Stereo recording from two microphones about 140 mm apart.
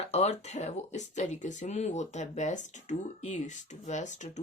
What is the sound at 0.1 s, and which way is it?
Speech, 50° left (ahead or behind).